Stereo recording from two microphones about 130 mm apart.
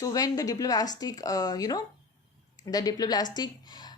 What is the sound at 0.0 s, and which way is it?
A woman's voice, 30° left (ahead or behind).